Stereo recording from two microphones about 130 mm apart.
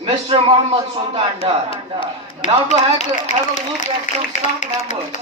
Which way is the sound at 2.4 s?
75° left (ahead or behind).